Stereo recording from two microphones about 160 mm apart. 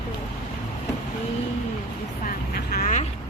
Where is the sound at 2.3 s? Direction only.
65° left (ahead or behind).